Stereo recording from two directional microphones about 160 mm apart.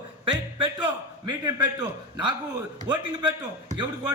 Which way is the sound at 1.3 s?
25° right (ahead or behind).